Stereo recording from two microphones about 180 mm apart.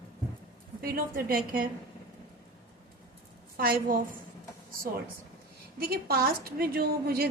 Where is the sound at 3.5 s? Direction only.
55° right (ahead or behind).